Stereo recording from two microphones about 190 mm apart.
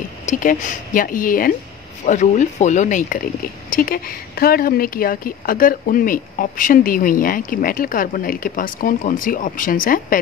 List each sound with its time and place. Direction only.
0.3 s speech: 40° left (ahead or behind)